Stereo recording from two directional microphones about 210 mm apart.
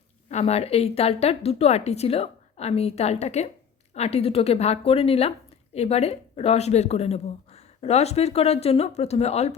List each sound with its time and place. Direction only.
0.3 s a woman's voice: 30° left (ahead or behind)